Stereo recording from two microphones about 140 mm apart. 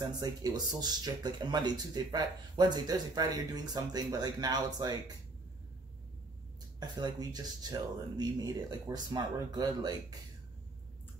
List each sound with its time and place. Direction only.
0.0 s speech: 30° right (ahead or behind)
6.8 s speech: 30° right (ahead or behind)